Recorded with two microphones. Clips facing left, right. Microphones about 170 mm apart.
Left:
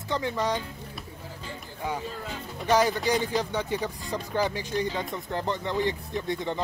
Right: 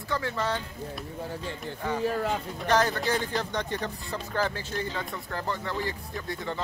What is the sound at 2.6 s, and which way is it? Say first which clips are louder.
Speech: left 3 dB; 10° left (ahead or behind).